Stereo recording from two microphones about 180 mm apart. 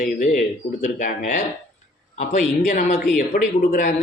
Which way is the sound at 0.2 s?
45° left (ahead or behind).